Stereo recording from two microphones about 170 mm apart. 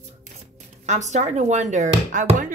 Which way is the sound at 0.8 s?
45° right (ahead or behind).